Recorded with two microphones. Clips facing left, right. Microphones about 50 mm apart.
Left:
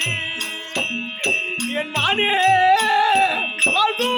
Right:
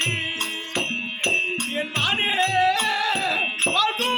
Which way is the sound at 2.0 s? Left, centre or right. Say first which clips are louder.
Left 7 dB; left.